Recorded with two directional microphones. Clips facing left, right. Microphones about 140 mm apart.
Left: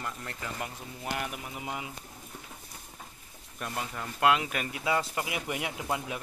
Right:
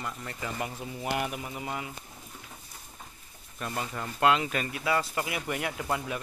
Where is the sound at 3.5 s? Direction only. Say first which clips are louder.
Right 2 dB; 5° left (ahead or behind).